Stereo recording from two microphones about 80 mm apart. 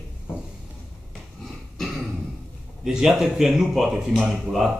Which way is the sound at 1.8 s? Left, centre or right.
Centre.